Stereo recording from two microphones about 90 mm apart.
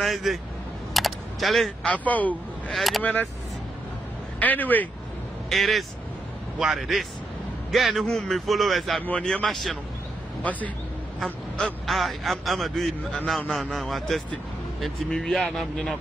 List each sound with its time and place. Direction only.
0.0 s speech: centre (ahead or behind)
0.9 s a sound: centre (ahead or behind)
1.9 s speech: 15° left (ahead or behind)
2.7 s speech: centre (ahead or behind)
3.0 s speech: 20° left (ahead or behind)
4.4 s speech: 20° left (ahead or behind)
5.5 s speech: centre (ahead or behind)
10.4 s speech: 15° left (ahead or behind)